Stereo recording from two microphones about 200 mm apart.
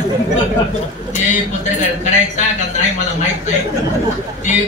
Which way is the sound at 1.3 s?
35° left (ahead or behind).